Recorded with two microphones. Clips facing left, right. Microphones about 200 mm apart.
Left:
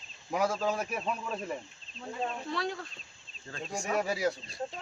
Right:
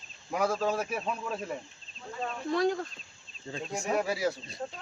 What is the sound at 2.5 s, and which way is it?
Speech, 45° right (ahead or behind).